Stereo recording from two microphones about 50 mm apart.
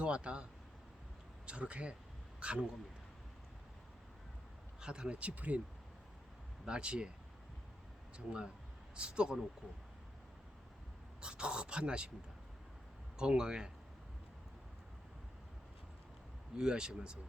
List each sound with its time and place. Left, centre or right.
0.0 s speech: right
1.5 s speech: right
4.8 s speech: centre
6.7 s speech: centre
9.0 s speech: centre
11.2 s speech: centre
13.1 s speech: centre
16.6 s speech: centre